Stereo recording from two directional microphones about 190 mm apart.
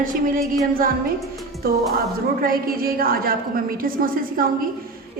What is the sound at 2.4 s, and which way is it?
A woman's voice, 50° right (ahead or behind).